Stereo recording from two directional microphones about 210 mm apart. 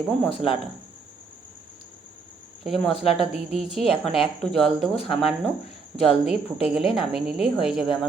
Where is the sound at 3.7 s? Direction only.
Centre (ahead or behind).